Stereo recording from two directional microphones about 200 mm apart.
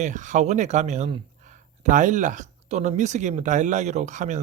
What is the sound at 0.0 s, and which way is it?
Speech, 40° right (ahead or behind).